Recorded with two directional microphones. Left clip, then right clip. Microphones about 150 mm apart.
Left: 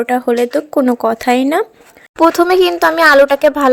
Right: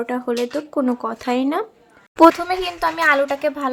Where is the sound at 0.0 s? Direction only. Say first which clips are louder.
Left 9 dB; 35° left (ahead or behind).